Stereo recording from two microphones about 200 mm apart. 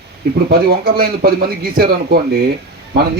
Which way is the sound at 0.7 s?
50° right (ahead or behind).